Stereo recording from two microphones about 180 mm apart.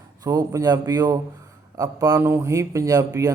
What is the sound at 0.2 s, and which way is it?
A man's voice, 20° right (ahead or behind).